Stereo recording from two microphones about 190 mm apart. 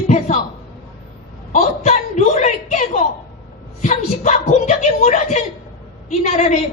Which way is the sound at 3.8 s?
40° left (ahead or behind).